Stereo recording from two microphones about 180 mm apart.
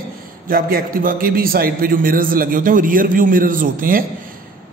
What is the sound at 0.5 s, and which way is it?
A man's voice, 55° right (ahead or behind).